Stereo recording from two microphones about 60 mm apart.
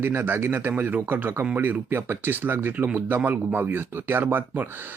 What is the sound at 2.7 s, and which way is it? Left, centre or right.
Speech, right.